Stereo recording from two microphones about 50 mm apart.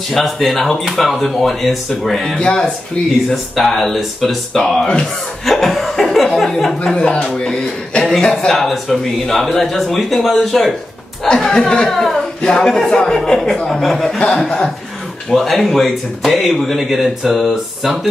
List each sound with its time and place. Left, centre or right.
0.1 s speech: centre
2.4 s speech: centre
3.3 s speech: centre
5.4 s speech: centre
11.2 s speech: centre
14.1 s speech: centre
15.2 s speech: centre